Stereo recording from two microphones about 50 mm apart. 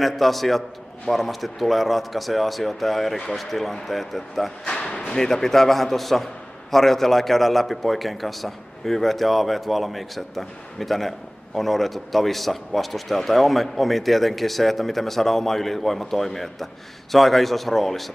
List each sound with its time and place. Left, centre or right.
0.0 s a man's voice: centre
4.6 s a man's voice: centre